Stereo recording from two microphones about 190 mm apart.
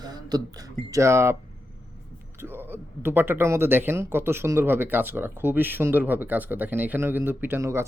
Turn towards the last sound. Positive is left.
turn(degrees=-15)  # may be behind; listen again after turning